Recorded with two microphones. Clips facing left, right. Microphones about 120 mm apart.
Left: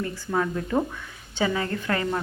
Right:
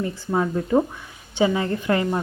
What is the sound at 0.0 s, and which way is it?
Speech, 20° right (ahead or behind).